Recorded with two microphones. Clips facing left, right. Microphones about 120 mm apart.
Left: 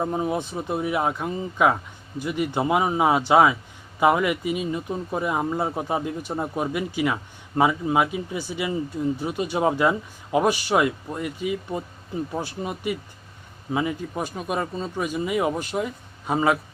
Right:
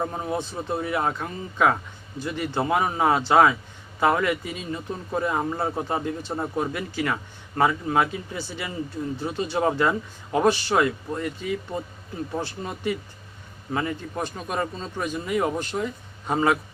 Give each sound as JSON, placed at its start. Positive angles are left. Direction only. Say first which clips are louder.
{"t": 0.0, "sound": "speech", "louder": "left 3 dB", "side_deg": 10}